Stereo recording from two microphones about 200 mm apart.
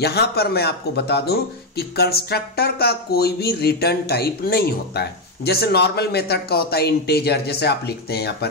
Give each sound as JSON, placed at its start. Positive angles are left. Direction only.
{"t": 0.0, "sound": "speech", "side_deg": 55}